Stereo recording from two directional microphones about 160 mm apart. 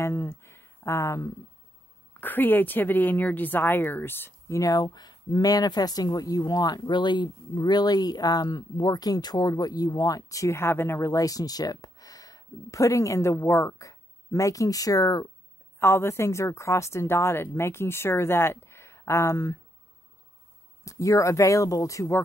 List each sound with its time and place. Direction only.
0.0 s a sound: 15° left (ahead or behind)
2.1 s a woman's voice: 10° left (ahead or behind)
20.8 s a woman's voice: 20° left (ahead or behind)